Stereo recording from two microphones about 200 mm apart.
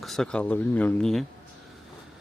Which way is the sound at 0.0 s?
Centre (ahead or behind).